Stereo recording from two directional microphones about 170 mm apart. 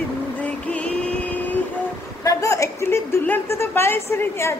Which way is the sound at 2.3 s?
20° left (ahead or behind).